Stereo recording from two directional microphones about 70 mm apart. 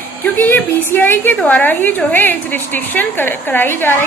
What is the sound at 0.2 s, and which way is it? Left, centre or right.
A woman's voice, left.